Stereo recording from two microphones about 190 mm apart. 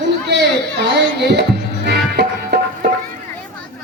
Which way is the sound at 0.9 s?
60° right (ahead or behind).